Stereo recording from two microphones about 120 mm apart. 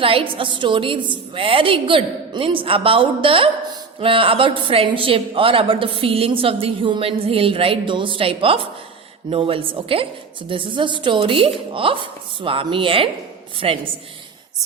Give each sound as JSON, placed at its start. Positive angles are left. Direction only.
{"t": 0.0, "sound": "a woman's voice", "side_deg": -50}